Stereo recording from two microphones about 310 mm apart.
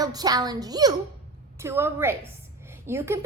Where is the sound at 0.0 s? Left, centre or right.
Centre.